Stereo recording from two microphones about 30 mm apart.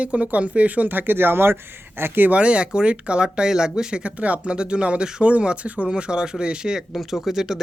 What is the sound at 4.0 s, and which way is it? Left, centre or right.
Speech, right.